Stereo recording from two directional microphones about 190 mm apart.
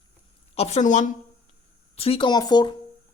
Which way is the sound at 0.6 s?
35° left (ahead or behind).